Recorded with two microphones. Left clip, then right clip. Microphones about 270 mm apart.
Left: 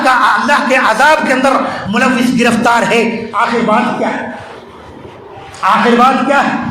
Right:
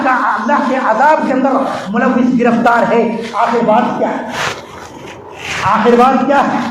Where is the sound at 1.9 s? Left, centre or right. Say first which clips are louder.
Left 2 dB; left.